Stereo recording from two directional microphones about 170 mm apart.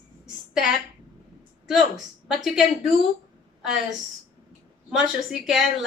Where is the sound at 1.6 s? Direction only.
Centre (ahead or behind).